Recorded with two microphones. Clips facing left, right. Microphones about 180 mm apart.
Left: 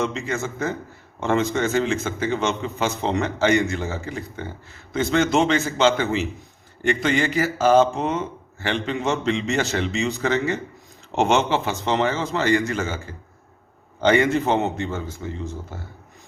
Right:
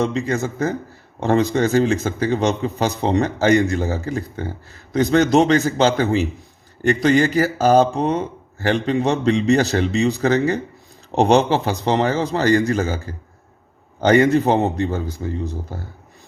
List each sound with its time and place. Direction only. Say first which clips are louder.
0.0 s speech: right 5 dB; 35° right (ahead or behind)
14.0 s speech: right 4 dB; 40° right (ahead or behind)